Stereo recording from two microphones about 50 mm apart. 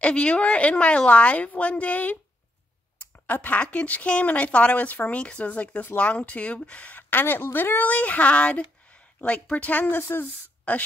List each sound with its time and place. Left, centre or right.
0.0 s speech: left
3.3 s speech: left
7.0 s speech: left
9.9 s speech: left